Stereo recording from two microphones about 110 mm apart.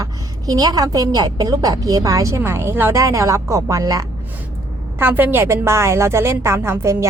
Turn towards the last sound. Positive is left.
turn(degrees=-25)  # may be behind; listen again after turning